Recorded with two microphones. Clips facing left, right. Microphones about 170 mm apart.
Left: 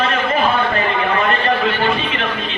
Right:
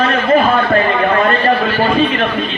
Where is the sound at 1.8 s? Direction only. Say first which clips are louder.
Right 6 dB; 40° right (ahead or behind).